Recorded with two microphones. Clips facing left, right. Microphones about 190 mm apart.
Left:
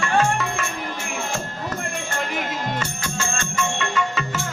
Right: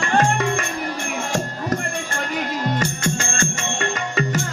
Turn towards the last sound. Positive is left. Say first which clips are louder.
# right 2 dB
turn(degrees=-40)  # may be behind; listen again after turning